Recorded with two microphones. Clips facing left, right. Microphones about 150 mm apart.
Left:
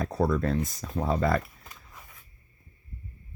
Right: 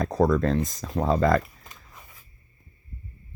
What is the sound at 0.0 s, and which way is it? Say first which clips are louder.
Speech: right 4 dB; 90° right.